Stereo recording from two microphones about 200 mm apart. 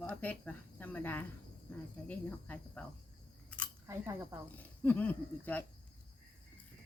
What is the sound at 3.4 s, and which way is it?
Chewing, 5° left (ahead or behind).